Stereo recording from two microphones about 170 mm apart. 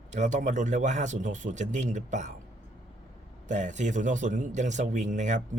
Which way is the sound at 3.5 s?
45° right (ahead or behind).